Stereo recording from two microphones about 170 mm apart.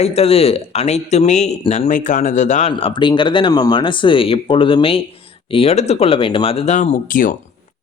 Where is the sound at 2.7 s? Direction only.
30° left (ahead or behind).